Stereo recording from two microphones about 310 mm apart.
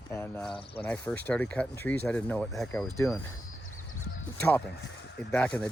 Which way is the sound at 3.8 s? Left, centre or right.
Left.